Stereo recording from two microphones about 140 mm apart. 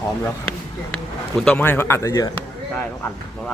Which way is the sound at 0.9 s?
5° left (ahead or behind).